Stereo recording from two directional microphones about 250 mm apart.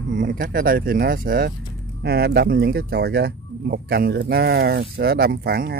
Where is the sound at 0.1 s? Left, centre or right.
Right.